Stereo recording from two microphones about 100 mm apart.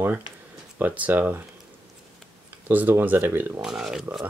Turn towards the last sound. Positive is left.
turn(degrees=-5)  # may be behind; listen again after turning